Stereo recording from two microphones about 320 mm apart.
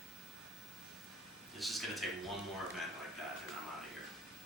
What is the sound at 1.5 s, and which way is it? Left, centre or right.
Speech, centre.